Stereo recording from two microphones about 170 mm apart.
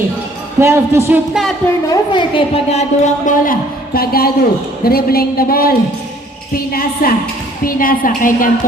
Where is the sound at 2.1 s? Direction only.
35° left (ahead or behind).